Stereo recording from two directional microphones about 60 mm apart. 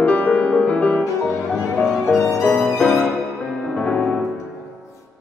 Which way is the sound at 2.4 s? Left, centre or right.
Centre.